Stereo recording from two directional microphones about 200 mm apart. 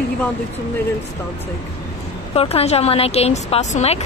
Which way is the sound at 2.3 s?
30° left (ahead or behind).